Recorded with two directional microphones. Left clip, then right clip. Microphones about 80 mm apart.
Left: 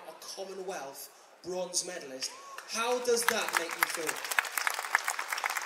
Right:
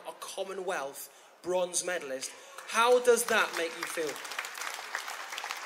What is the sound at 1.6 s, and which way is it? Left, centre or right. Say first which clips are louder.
Speech: even; left.